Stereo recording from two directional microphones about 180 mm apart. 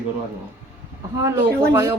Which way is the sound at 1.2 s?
15° right (ahead or behind).